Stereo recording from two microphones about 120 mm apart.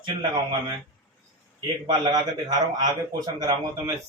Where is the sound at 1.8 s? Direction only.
35° right (ahead or behind).